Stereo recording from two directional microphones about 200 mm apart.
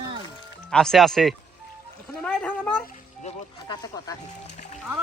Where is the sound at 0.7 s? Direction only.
Centre (ahead or behind).